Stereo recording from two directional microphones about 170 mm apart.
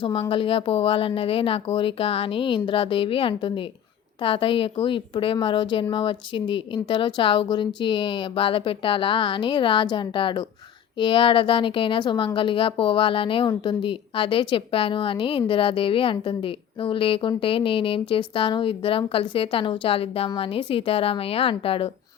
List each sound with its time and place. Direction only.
0.0 s a woman's voice: 30° left (ahead or behind)